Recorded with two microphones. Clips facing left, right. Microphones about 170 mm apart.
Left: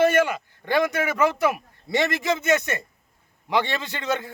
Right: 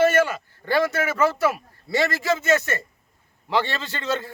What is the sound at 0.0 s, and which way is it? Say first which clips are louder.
A man's voice: even; 15° left (ahead or behind).